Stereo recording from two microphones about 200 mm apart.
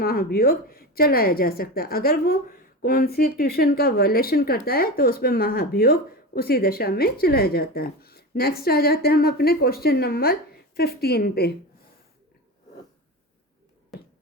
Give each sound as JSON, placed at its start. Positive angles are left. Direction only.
{"t": 0.0, "sound": "a woman's voice", "side_deg": 50}